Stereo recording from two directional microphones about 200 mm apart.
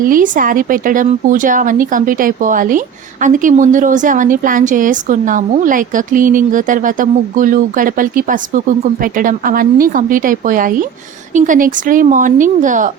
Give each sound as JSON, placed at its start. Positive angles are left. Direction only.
{"t": 0.0, "sound": "speech", "side_deg": -45}